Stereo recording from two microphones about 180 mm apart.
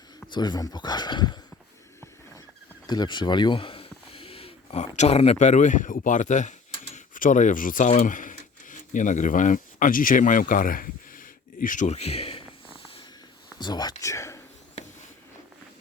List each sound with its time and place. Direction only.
0.3 s speech: 25° left (ahead or behind)
2.8 s a sound: 25° left (ahead or behind)
4.9 s speech: 35° left (ahead or behind)
13.6 s speech: 25° left (ahead or behind)